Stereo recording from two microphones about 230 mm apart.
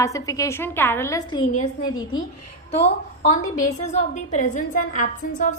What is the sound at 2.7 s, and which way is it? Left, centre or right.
A woman's voice, left.